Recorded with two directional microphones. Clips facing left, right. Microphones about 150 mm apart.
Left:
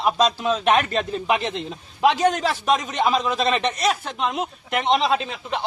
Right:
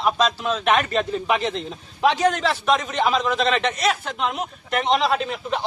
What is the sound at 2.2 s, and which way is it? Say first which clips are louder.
Speech: even; 35° left (ahead or behind).